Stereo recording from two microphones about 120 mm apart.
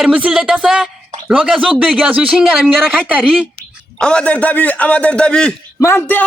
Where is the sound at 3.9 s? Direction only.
10° left (ahead or behind).